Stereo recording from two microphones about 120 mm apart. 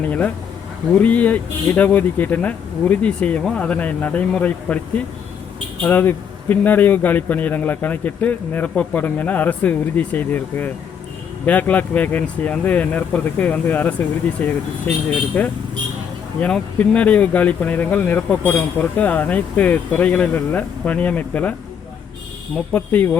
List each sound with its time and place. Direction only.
0.9 s speech: 10° left (ahead or behind)
22.7 s speech: 15° left (ahead or behind)